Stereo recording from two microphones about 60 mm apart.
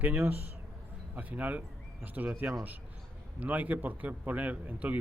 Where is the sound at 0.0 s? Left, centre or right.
Right.